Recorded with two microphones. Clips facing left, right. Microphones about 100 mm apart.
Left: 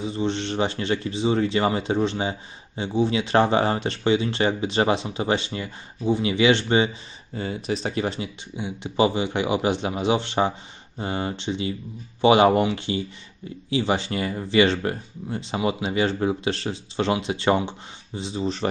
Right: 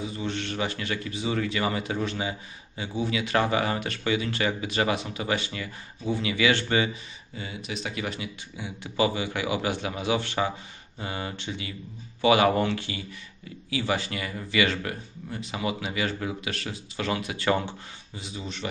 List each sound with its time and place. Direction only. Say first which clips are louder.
0.0 s speech: left 6 dB; 25° left (ahead or behind)
7.3 s speech: left 8 dB; 40° left (ahead or behind)